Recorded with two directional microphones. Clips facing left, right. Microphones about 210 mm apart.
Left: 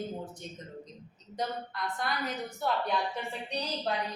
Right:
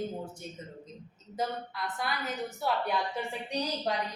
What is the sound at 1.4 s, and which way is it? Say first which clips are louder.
A woman's voice: right 1 dB; 5° right (ahead or behind).